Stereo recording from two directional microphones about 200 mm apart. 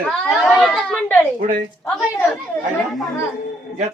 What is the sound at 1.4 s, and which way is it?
Speech, 45° right (ahead or behind).